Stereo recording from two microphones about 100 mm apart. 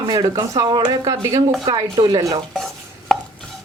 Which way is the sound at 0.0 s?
45° right (ahead or behind).